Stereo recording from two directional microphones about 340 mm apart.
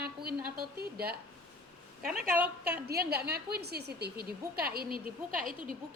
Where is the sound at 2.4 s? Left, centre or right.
Centre.